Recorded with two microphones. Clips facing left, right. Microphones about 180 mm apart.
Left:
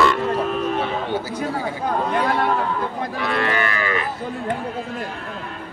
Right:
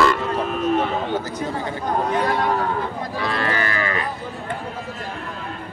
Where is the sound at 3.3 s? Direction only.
35° right (ahead or behind).